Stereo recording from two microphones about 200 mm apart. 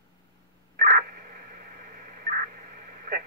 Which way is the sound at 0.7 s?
40° right (ahead or behind).